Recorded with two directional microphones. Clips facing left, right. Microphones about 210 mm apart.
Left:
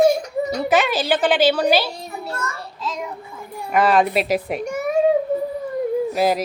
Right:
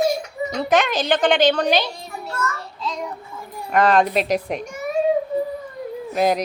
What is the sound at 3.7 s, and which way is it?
Speech, 5° left (ahead or behind).